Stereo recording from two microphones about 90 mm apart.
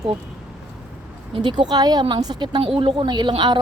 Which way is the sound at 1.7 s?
50° right (ahead or behind).